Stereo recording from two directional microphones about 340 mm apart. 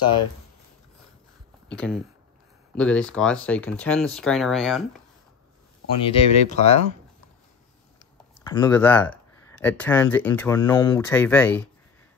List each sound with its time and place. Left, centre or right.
1.7 s speech: centre
6.0 s speech: centre
8.4 s speech: centre